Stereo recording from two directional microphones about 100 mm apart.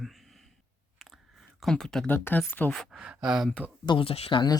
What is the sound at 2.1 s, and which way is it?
Speech, 20° left (ahead or behind).